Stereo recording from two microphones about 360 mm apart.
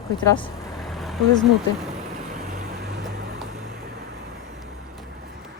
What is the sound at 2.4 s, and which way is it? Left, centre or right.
Vehicle, right.